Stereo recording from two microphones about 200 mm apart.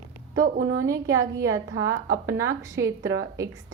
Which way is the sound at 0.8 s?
15° right (ahead or behind).